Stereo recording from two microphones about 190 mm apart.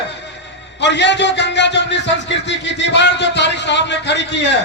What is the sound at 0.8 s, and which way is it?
A man's voice, 65° left (ahead or behind).